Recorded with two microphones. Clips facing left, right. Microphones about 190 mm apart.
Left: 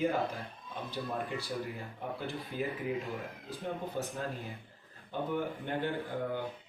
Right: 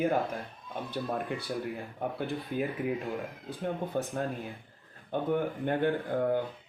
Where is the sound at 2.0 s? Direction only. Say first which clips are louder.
Right 5 dB; 55° right (ahead or behind).